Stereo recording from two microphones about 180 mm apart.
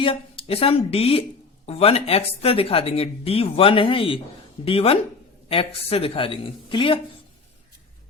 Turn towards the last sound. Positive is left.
turn(degrees=30)  # may be behind; listen again after turning